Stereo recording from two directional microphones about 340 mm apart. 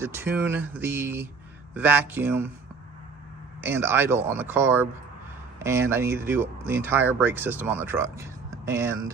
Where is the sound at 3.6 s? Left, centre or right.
Centre.